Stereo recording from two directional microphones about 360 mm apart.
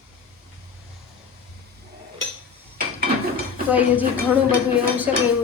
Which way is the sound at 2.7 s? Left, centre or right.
Right.